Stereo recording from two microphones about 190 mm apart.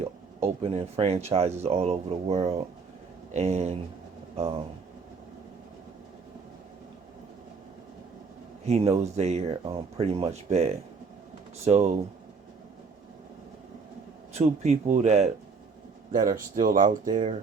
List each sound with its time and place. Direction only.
0.0 s speech: 35° right (ahead or behind)
8.6 s speech: 35° right (ahead or behind)
14.3 s speech: 35° right (ahead or behind)